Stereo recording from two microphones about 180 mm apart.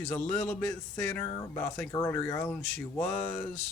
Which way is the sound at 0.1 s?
5° left (ahead or behind).